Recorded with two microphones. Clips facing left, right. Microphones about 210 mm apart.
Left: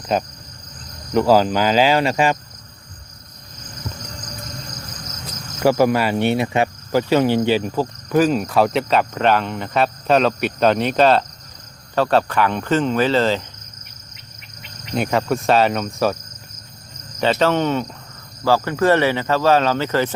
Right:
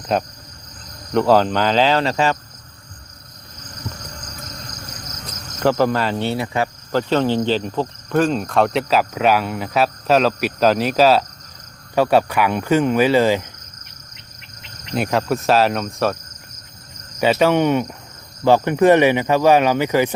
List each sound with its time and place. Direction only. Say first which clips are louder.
0.1 s cricket: even; centre (ahead or behind)
1.1 s speech: even; 5° left (ahead or behind)
5.2 s cricket: left 1 dB; 10° left (ahead or behind)
6.9 s cricket: left 1 dB; 10° left (ahead or behind)
11.9 s speech: right 1 dB; 10° right (ahead or behind)
14.6 s insect: even; centre (ahead or behind)
17.2 s speech: right 2 dB; 10° right (ahead or behind)